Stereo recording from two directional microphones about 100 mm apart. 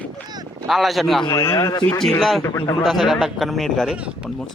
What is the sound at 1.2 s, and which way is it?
Speech, 40° left (ahead or behind).